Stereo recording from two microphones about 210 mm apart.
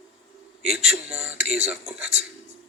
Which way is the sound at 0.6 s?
Centre (ahead or behind).